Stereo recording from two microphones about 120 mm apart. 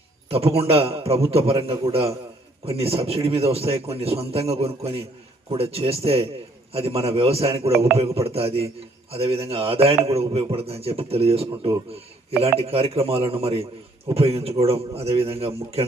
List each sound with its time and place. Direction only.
0.3 s a man's voice: 55° right (ahead or behind)